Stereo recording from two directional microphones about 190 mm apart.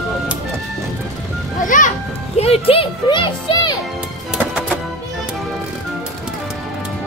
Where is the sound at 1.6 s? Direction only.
45° left (ahead or behind).